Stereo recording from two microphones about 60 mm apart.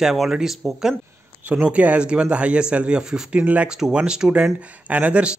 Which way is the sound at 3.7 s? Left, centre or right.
Centre.